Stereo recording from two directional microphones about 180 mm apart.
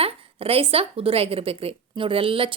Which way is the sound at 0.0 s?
35° right (ahead or behind).